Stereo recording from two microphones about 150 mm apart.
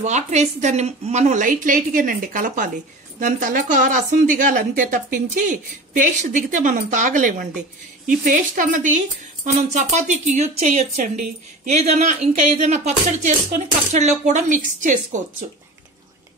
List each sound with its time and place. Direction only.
0.0 s speech: 50° right (ahead or behind)
6.5 s speech: 60° right (ahead or behind)